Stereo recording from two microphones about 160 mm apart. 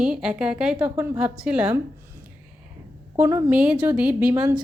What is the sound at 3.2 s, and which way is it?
Speech, 15° right (ahead or behind).